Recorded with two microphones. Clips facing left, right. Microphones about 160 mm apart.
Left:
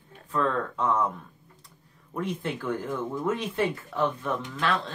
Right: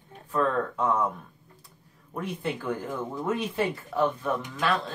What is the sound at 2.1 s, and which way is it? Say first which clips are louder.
Speech: left 1 dB; 5° right (ahead or behind).